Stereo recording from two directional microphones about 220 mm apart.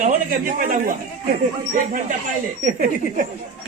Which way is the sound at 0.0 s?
40° right (ahead or behind).